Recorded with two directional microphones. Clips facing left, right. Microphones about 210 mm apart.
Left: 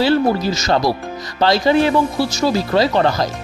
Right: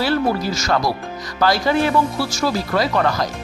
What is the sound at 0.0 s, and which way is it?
Speech, 20° left (ahead or behind).